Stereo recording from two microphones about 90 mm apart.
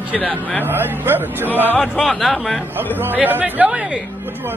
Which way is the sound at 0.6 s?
25° right (ahead or behind).